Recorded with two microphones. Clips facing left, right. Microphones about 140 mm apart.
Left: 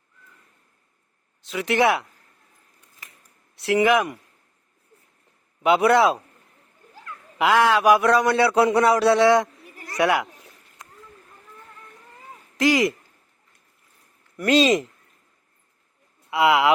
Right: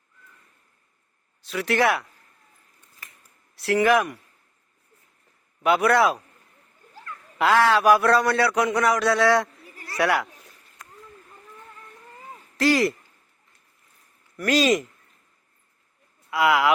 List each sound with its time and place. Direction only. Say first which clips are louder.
1.4 s speech: left 2 dB; 20° left (ahead or behind)
3.5 s speech: left 1 dB; 20° left (ahead or behind)
5.6 s speech: left 2 dB; 20° left (ahead or behind)
6.9 s speech: even; 15° left (ahead or behind)
12.5 s speech: left 1 dB; 15° left (ahead or behind)
14.3 s speech: left 2 dB; 25° left (ahead or behind)
16.3 s speech: left 2 dB; 25° left (ahead or behind)